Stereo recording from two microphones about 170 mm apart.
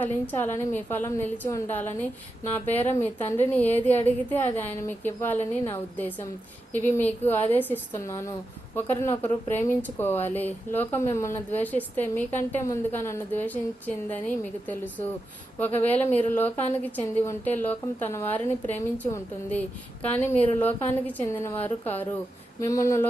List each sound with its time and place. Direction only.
0.0 s a woman's voice: 10° left (ahead or behind)